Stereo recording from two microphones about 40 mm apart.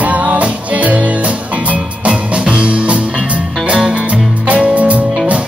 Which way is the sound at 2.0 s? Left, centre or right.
Right.